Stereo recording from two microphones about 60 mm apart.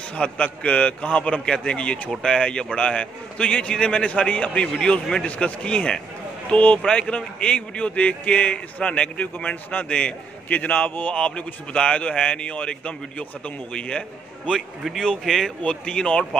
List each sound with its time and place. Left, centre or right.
0.1 s a man's voice: centre
4.6 s a man's voice: centre
5.2 s a man's voice: centre
6.8 s a man's voice: centre
15.0 s a man's voice: centre
15.6 s a man's voice: centre